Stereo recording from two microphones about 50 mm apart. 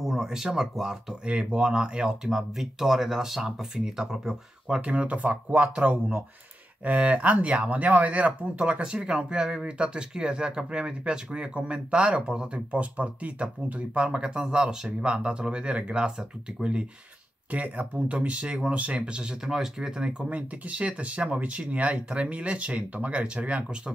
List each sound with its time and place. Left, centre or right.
0.0 s speech: centre
1.2 s speech: centre
4.8 s speech: right
17.5 s speech: right
20.2 s speech: right